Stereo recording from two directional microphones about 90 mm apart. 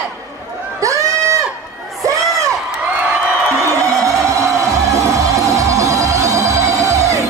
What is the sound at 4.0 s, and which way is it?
Music, 35° right (ahead or behind).